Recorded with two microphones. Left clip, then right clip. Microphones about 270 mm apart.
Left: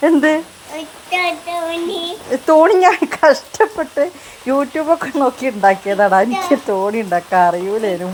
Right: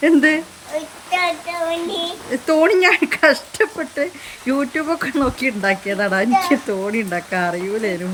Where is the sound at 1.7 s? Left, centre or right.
Centre.